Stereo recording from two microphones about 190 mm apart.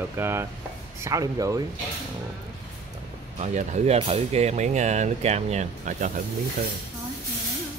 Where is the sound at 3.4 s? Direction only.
40° right (ahead or behind).